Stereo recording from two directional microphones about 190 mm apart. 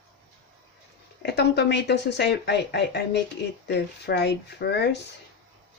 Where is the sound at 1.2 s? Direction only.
60° left (ahead or behind).